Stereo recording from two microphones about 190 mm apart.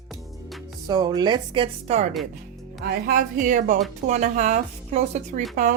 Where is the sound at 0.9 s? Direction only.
20° right (ahead or behind).